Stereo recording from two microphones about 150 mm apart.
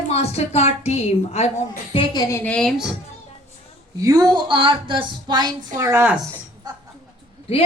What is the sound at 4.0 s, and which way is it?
A woman's voice, 25° right (ahead or behind).